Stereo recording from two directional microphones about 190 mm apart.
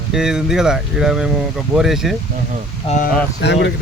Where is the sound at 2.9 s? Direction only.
30° left (ahead or behind).